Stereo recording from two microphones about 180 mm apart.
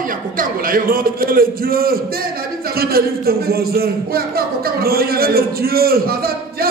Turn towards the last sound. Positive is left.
turn(degrees=-55)  # may be behind; listen again after turning